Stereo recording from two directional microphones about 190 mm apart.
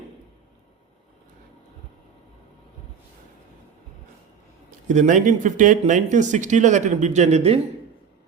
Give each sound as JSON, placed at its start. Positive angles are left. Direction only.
{"t": 4.9, "sound": "speech", "side_deg": -40}